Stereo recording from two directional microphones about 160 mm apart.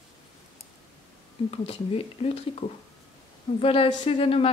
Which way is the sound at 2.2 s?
35° left (ahead or behind).